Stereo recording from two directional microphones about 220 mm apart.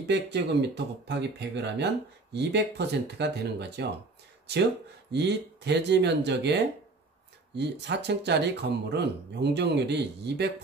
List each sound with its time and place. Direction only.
0.0 s speech: 50° right (ahead or behind)
5.1 s speech: 50° right (ahead or behind)